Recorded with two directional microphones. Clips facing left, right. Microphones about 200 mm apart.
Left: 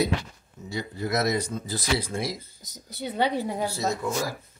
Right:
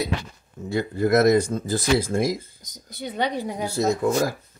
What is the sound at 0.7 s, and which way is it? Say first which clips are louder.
Speech: right 9 dB; 55° right (ahead or behind).